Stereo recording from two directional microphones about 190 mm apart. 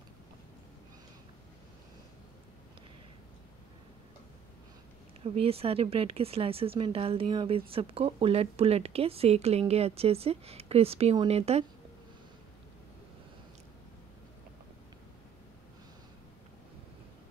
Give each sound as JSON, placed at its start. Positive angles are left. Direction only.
{"t": 5.2, "sound": "speech", "side_deg": -30}